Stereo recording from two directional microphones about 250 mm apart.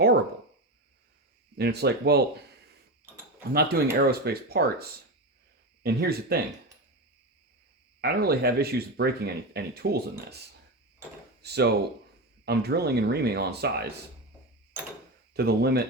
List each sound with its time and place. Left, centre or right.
1.5 s speech: right
3.5 s speech: right
8.0 s speech: right
11.4 s speech: right
15.3 s speech: right